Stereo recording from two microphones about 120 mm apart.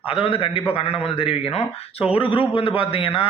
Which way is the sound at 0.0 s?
50° left (ahead or behind).